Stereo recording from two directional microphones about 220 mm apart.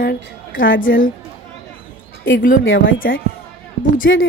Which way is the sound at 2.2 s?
60° left (ahead or behind).